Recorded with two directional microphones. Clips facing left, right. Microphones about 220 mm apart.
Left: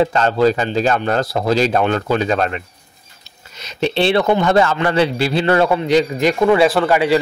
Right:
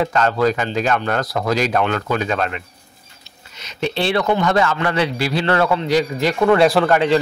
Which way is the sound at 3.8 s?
25° left (ahead or behind).